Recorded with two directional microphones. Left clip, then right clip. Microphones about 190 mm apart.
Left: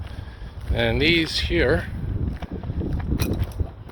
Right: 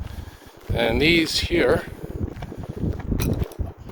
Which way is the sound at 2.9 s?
10° right (ahead or behind).